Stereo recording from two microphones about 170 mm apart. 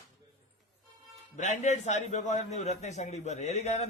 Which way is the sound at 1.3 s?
45° left (ahead or behind).